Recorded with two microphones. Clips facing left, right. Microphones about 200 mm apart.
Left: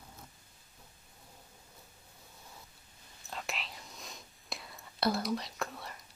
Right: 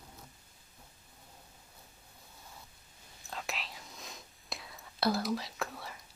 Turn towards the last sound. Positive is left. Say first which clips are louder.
# even
turn(degrees=0)  # may be behind; listen again after turning